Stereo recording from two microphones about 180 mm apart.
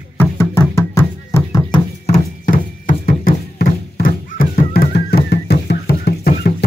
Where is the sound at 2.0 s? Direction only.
45° left (ahead or behind); by 6.7 s 60° left (ahead or behind).